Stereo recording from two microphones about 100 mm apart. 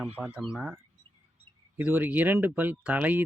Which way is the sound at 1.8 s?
20° right (ahead or behind).